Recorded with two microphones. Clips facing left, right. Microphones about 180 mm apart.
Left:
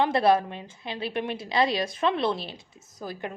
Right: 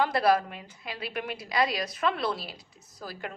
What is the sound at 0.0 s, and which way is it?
A woman's voice, 25° left (ahead or behind).